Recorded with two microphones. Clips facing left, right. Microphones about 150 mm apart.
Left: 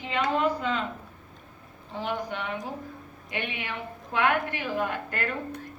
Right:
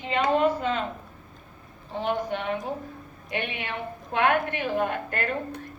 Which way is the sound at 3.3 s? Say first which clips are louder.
Right 2 dB; 55° right (ahead or behind).